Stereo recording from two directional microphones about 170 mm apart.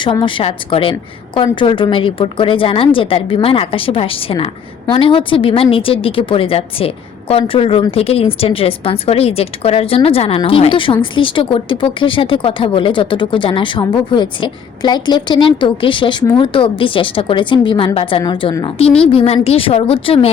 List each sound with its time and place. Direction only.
0.0 s a woman's voice: 30° left (ahead or behind)